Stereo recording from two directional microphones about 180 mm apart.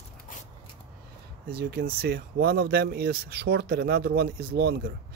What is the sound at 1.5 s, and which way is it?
Speech, 60° right (ahead or behind).